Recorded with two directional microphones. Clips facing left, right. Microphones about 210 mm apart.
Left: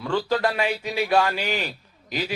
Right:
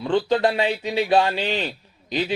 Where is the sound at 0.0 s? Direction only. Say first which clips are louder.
Right 4 dB; 20° right (ahead or behind).